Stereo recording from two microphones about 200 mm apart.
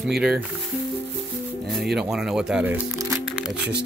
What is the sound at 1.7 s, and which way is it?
Speech, centre (ahead or behind).